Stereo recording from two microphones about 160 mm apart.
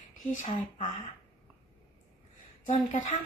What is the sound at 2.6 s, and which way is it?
Speech, 50° left (ahead or behind).